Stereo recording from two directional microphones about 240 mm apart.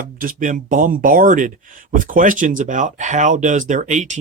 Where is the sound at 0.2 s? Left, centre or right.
Right.